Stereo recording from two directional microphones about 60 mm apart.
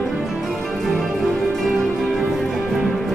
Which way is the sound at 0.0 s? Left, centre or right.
Centre.